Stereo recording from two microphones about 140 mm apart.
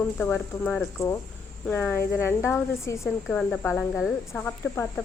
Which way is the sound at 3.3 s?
10° left (ahead or behind).